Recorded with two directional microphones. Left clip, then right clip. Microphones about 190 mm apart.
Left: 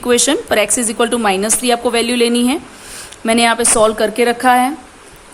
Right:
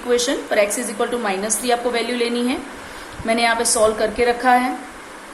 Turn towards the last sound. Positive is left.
turn(degrees=40)  # may be behind; listen again after turning